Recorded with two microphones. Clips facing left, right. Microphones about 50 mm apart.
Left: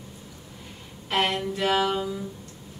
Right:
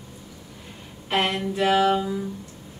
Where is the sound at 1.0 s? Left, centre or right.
Centre.